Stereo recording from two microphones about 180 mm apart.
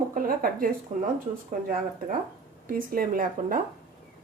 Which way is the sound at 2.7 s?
50° right (ahead or behind).